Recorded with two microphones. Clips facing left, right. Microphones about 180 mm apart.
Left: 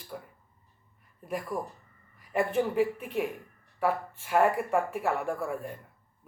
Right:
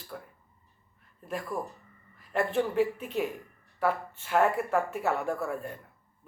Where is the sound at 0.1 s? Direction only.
10° left (ahead or behind).